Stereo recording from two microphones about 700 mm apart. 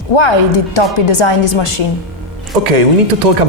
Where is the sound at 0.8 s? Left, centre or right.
Left.